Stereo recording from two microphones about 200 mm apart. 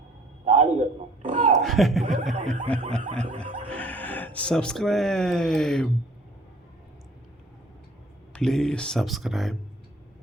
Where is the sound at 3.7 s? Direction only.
5° left (ahead or behind).